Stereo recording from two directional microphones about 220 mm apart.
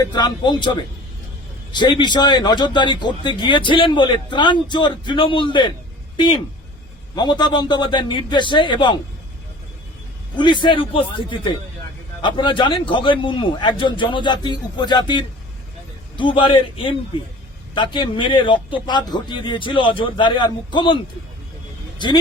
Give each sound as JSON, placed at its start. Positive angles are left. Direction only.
{"t": 0.0, "sound": "a man's voice", "side_deg": 20}
{"t": 7.2, "sound": "a man's voice", "side_deg": 20}
{"t": 10.3, "sound": "a man's voice", "side_deg": 20}